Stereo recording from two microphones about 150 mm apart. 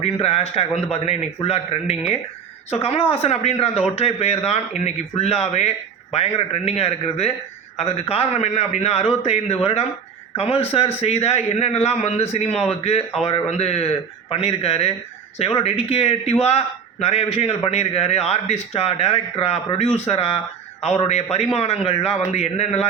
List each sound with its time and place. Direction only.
0.0 s a man's voice: 45° left (ahead or behind)